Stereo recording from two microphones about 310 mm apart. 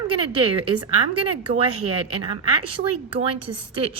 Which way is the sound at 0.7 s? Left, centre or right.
Right.